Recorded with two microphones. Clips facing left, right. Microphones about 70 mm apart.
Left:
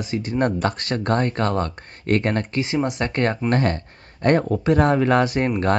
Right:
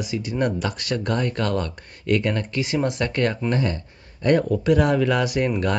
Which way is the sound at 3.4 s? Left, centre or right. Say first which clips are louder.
Left 3 dB; left.